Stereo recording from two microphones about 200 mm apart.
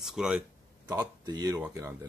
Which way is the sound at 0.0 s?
5° right (ahead or behind).